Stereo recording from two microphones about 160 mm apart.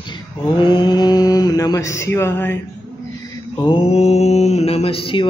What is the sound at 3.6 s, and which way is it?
Mantra, 35° left (ahead or behind).